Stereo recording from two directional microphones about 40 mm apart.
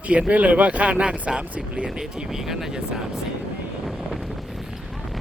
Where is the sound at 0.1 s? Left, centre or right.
Right.